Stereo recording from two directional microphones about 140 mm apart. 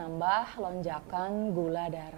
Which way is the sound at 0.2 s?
15° right (ahead or behind).